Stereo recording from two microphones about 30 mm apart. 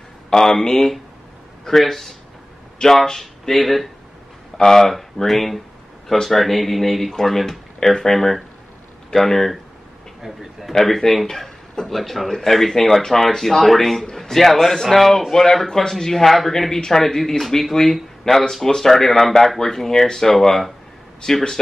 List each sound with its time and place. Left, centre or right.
0.3 s speech: centre
10.2 s speech: centre
10.9 s speech: centre
17.2 s speech: centre